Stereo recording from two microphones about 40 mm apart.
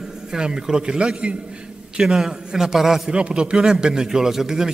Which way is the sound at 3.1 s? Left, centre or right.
Right.